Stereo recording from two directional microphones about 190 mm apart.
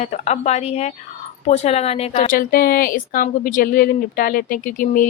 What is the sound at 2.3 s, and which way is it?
A woman's voice, 50° left (ahead or behind).